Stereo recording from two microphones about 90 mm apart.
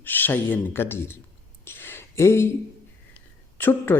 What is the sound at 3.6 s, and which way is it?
Speech, 20° left (ahead or behind).